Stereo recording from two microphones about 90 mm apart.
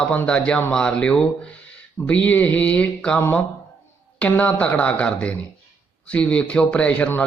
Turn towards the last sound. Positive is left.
turn(degrees=15)  # may be behind; listen again after turning